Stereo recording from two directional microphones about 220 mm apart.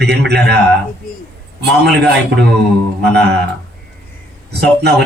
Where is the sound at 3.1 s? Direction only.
50° right (ahead or behind).